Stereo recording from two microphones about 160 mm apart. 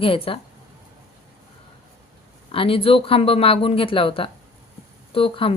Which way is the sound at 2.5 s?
35° left (ahead or behind).